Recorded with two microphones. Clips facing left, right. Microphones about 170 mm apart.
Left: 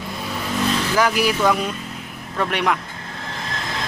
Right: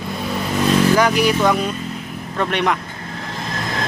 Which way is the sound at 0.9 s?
5° left (ahead or behind).